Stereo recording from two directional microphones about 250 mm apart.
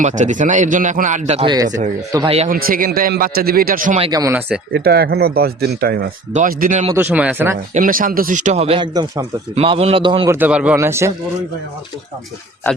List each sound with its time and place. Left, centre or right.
0.0 s speech: right
4.1 s speech: centre
4.7 s speech: right
6.9 s speech: centre
7.7 s speech: right; by 11.1 s centre